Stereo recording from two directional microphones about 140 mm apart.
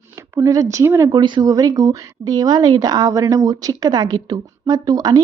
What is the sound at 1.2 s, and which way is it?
Speech, 30° right (ahead or behind).